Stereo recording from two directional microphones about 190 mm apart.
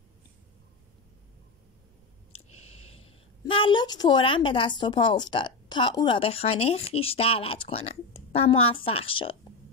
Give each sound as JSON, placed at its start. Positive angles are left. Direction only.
{"t": 3.4, "sound": "a woman's voice", "side_deg": 25}